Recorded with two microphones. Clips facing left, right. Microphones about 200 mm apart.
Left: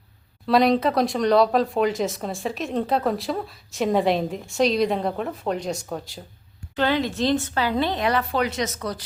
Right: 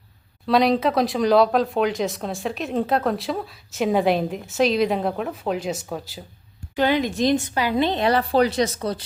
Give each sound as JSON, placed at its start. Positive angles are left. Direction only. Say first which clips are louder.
{"t": 0.4, "sound": "speech", "louder": "even", "side_deg": 0}
{"t": 6.7, "sound": "speech", "louder": "right 2 dB", "side_deg": -15}